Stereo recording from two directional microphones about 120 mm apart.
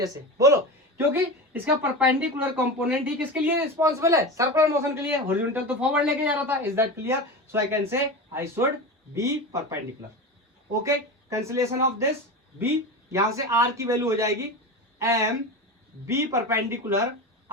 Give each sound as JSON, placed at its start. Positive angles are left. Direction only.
{"t": 0.0, "sound": "speech", "side_deg": -30}
{"t": 13.1, "sound": "speech", "side_deg": -25}